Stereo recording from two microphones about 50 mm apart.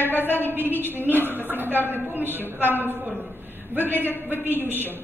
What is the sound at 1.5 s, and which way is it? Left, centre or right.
Speech, right.